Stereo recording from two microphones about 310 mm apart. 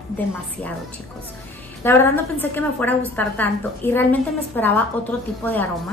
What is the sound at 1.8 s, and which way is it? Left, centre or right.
A woman's voice, centre.